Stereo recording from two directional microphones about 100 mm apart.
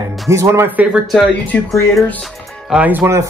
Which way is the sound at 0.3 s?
30° right (ahead or behind).